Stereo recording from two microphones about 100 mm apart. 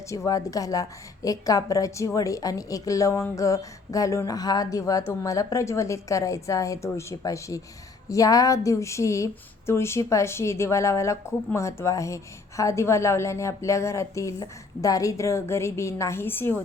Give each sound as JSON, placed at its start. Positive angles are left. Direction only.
{"t": 0.3, "sound": "a woman's voice", "side_deg": 35}